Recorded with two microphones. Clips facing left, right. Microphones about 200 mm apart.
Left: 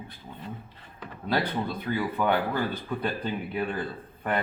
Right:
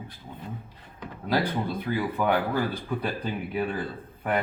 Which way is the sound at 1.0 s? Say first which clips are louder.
Right 2 dB; 10° right (ahead or behind).